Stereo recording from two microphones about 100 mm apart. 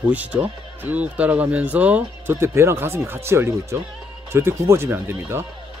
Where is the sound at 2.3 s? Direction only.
25° right (ahead or behind).